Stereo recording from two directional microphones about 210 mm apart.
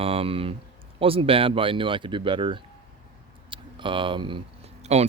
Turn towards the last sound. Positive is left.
turn(degrees=-30)  # may be behind; listen again after turning